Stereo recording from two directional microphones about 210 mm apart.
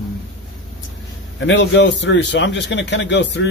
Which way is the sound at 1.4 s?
60° left (ahead or behind).